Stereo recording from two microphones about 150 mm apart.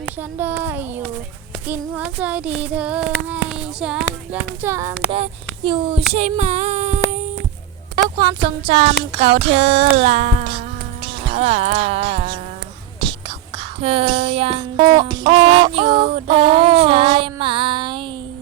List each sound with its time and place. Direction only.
0.0 s child singing: 15° right (ahead or behind)
5.1 s speech: 35° right (ahead or behind)
6.1 s female singing: 50° right (ahead or behind)
8.1 s music: 30° right (ahead or behind)
13.0 s whispering: 35° right (ahead or behind)
14.9 s music: 30° right (ahead or behind)